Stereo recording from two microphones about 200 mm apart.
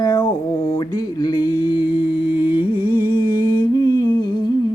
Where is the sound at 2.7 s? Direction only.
25° left (ahead or behind).